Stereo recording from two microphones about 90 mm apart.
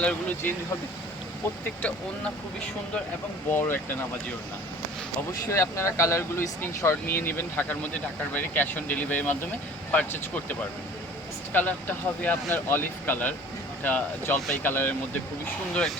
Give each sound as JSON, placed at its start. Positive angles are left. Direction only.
{"t": 0.0, "sound": "speech", "side_deg": 15}
{"t": 1.6, "sound": "speech", "side_deg": 15}
{"t": 3.5, "sound": "speech", "side_deg": 25}
{"t": 5.5, "sound": "speech", "side_deg": 30}